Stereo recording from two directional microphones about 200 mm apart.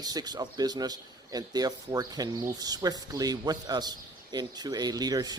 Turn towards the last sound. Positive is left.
turn(degrees=-20)  # may be behind; listen again after turning